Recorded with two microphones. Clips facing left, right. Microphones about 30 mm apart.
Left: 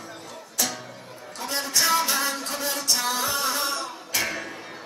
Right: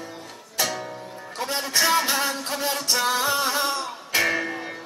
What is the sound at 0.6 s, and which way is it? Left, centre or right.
Music, right.